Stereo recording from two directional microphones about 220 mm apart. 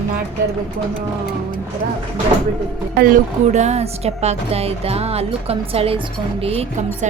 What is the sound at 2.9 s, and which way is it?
A woman's voice, 40° right (ahead or behind).